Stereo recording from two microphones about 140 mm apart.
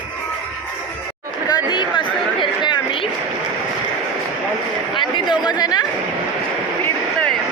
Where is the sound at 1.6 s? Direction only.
35° left (ahead or behind).